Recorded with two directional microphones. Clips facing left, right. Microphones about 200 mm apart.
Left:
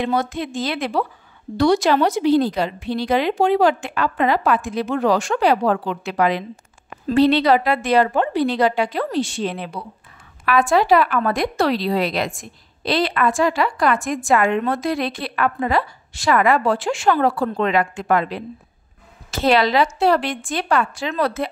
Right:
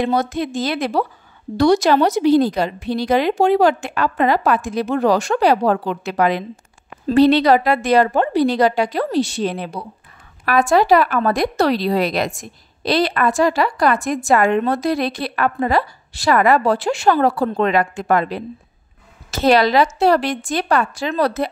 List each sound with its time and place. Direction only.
0.0 s a woman's voice: 40° right (ahead or behind)